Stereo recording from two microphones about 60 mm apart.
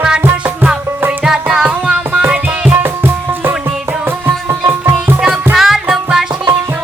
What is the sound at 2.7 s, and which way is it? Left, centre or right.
Music, right.